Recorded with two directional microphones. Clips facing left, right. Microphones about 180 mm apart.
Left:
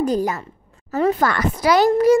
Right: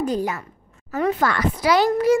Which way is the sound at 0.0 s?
40° left (ahead or behind).